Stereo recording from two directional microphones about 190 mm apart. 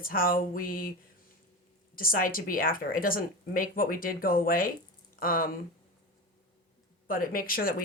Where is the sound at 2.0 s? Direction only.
50° left (ahead or behind).